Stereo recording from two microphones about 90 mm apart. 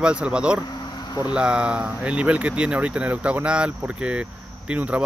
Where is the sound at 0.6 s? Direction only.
50° left (ahead or behind).